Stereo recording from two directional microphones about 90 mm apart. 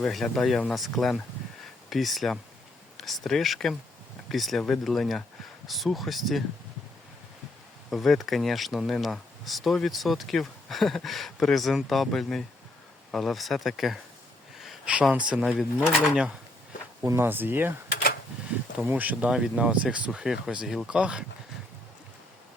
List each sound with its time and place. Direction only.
0.0 s speech: centre (ahead or behind)
7.9 s speech: centre (ahead or behind)
15.3 s speech: 10° right (ahead or behind)
17.0 s speech: 35° right (ahead or behind)
17.2 s speech: 20° right (ahead or behind)
18.9 s speech: 20° right (ahead or behind)